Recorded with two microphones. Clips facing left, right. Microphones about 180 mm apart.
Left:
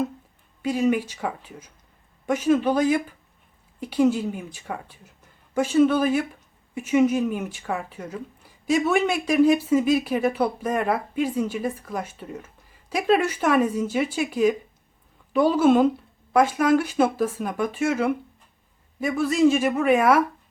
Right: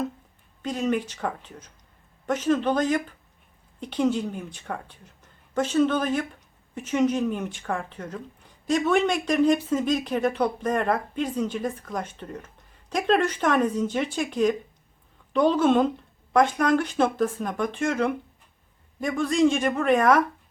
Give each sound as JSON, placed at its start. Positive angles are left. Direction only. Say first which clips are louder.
{"t": 0.6, "sound": "speech", "louder": "left 4 dB", "side_deg": 10}